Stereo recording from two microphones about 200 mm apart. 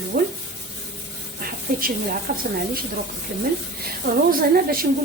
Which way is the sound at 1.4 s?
45° right (ahead or behind).